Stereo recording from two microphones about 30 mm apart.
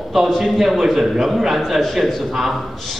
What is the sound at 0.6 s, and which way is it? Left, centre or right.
A man's voice, centre.